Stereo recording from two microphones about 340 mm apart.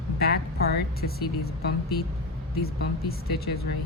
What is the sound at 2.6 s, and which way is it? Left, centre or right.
Speech, left.